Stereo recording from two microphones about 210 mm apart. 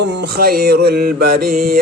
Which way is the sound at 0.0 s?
55° right (ahead or behind).